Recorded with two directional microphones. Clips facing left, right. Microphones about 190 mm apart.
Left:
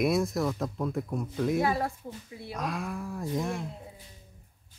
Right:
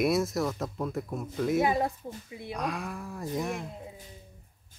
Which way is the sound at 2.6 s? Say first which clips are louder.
Left 1 dB; centre (ahead or behind).